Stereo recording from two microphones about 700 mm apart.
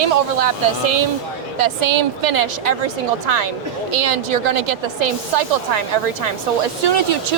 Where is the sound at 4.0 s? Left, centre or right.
Right.